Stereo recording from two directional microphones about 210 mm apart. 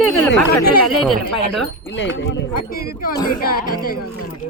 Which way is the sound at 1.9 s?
60° left (ahead or behind).